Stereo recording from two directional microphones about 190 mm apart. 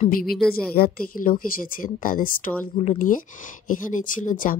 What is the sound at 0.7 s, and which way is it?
A woman's voice, 50° left (ahead or behind).